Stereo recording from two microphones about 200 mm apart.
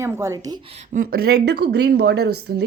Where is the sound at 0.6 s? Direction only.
35° right (ahead or behind).